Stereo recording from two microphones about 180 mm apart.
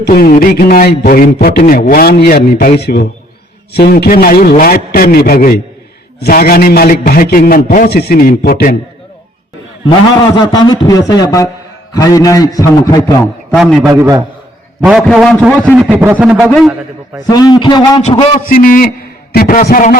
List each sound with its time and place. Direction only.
0.0 s a man's voice: 55° left (ahead or behind)
10.3 s a sound: 25° left (ahead or behind)
13.6 s a man's voice: centre (ahead or behind)
13.8 s a man's voice: 15° right (ahead or behind)
14.8 s a man's voice: 5° right (ahead or behind)
17.2 s a sound: 20° left (ahead or behind)
18.4 s a man's voice: 50° left (ahead or behind)